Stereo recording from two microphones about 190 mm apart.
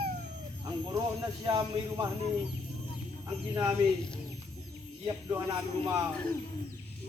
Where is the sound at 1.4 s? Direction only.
20° right (ahead or behind).